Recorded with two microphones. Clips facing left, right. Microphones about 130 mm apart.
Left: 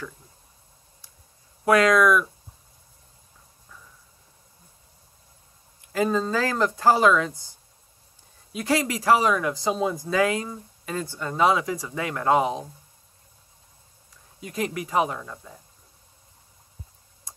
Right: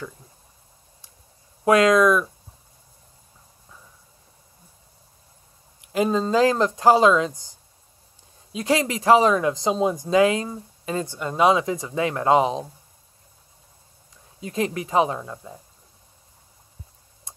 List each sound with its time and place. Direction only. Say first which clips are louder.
1.6 s speech: right 2 dB; 20° right (ahead or behind)
5.8 s speech: right 2 dB; 20° right (ahead or behind)
14.4 s speech: right 3 dB; 25° right (ahead or behind)